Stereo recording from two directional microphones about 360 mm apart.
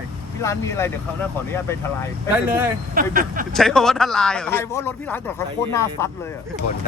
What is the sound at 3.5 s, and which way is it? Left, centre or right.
Speech, centre.